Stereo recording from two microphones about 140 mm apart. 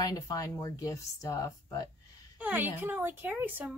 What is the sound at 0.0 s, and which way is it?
Speech, 25° left (ahead or behind).